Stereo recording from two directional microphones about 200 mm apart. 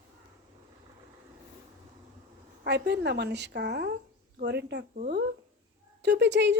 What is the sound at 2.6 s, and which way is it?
A woman's voice, 55° right (ahead or behind).